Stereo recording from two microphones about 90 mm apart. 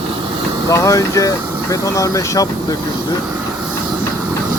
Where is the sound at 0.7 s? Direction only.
35° left (ahead or behind).